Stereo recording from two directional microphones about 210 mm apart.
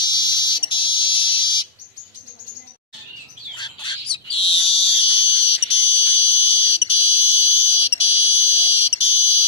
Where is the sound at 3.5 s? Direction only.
20° left (ahead or behind).